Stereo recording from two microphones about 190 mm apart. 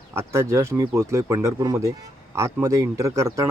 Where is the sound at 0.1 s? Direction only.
15° right (ahead or behind).